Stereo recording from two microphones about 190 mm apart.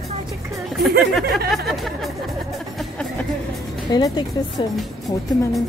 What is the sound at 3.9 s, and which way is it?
Speech, 20° left (ahead or behind).